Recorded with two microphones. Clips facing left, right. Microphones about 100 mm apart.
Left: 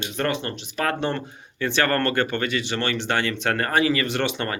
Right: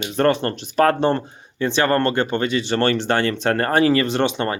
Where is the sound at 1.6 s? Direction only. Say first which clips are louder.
Right 4 dB; 25° right (ahead or behind).